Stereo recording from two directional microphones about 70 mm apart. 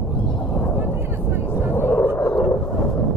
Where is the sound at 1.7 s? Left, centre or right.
Left.